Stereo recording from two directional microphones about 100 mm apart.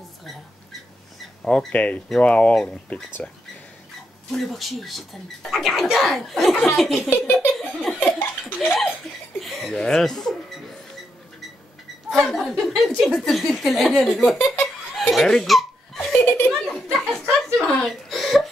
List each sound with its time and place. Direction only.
1.4 s speech: 10° left (ahead or behind)
7.3 s laughter: centre (ahead or behind)
8.0 s laughter: 20° left (ahead or behind)
9.4 s speech: centre (ahead or behind)
12.1 s speech: centre (ahead or behind)
14.4 s giggle: 25° left (ahead or behind)
15.0 s baby laughter: 5° left (ahead or behind)
16.4 s a sound: centre (ahead or behind)